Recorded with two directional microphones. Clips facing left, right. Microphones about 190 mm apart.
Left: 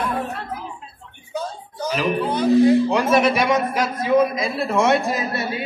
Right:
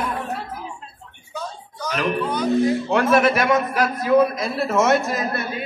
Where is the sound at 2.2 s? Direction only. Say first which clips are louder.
Left 3 dB; 30° left (ahead or behind).